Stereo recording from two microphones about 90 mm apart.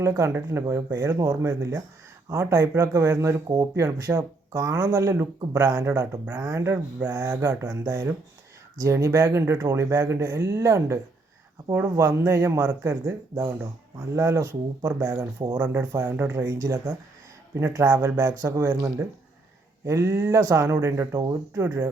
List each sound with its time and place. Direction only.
0.0 s speech: 35° right (ahead or behind)
21.2 s speech: 45° right (ahead or behind)